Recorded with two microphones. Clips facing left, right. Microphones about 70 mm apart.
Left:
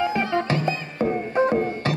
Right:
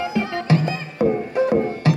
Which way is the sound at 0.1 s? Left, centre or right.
Left.